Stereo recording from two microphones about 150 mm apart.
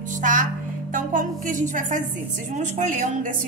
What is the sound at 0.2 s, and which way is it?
Music, 60° right (ahead or behind).